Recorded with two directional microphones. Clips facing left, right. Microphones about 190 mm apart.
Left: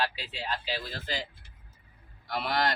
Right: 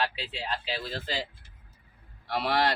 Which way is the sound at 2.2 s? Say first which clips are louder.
Right 3 dB; 35° right (ahead or behind).